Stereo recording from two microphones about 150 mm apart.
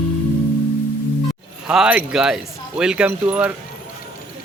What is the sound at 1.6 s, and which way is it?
Speech, 5° right (ahead or behind).